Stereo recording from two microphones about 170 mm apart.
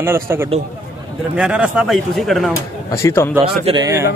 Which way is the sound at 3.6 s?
25° right (ahead or behind).